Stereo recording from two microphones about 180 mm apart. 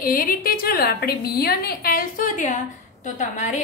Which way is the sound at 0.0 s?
55° left (ahead or behind).